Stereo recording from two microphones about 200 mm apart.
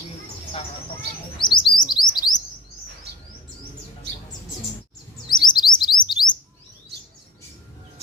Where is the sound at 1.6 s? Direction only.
20° left (ahead or behind).